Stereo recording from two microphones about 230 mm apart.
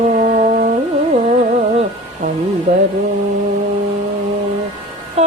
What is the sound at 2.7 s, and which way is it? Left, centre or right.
Music, right.